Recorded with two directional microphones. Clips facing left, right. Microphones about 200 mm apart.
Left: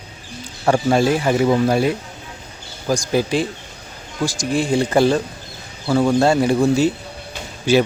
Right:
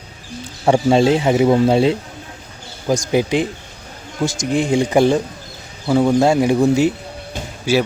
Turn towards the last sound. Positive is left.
turn(degrees=-10)  # may be behind; listen again after turning